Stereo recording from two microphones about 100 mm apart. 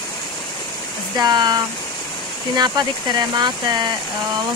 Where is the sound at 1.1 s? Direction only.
45° right (ahead or behind).